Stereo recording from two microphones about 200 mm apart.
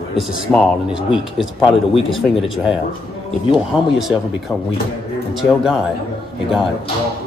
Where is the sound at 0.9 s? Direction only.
25° left (ahead or behind).